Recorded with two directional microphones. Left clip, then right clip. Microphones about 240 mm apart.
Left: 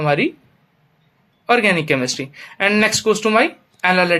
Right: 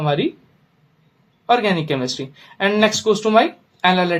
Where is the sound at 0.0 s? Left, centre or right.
Left.